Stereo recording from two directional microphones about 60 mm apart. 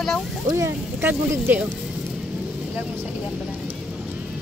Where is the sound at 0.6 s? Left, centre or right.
Right.